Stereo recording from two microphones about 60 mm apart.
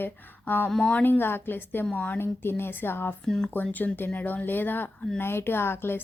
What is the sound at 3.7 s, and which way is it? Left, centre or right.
Speech, left.